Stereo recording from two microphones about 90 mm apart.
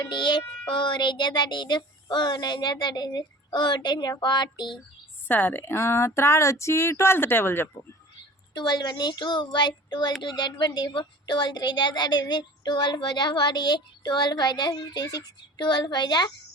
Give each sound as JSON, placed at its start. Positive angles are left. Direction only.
{"t": 0.1, "sound": "speech", "side_deg": 60}
{"t": 5.3, "sound": "speech", "side_deg": 20}
{"t": 8.5, "sound": "speech", "side_deg": 55}